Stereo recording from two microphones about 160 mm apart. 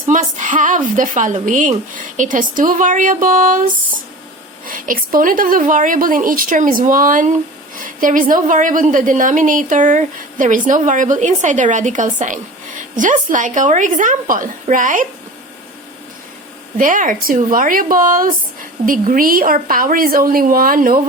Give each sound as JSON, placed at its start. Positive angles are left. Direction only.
{"t": 0.1, "sound": "a woman's voice", "side_deg": -50}
{"t": 4.6, "sound": "a woman's voice", "side_deg": -60}
{"t": 16.7, "sound": "speech", "side_deg": -55}